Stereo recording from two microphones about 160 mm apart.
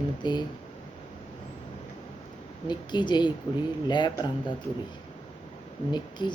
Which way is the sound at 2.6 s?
30° left (ahead or behind).